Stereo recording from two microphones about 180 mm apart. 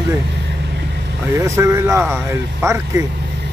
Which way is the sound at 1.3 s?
15° right (ahead or behind).